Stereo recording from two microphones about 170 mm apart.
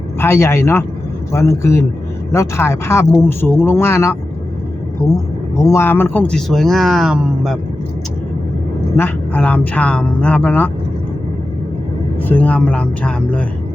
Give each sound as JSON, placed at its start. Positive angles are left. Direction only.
{"t": 0.2, "sound": "speech", "side_deg": 15}
{"t": 9.0, "sound": "speech", "side_deg": 10}
{"t": 12.3, "sound": "speech", "side_deg": 10}